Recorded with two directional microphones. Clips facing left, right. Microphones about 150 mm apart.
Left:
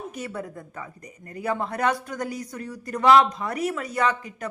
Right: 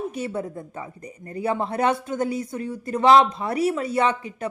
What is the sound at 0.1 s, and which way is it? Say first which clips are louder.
A woman's voice: right 5 dB; 30° right (ahead or behind).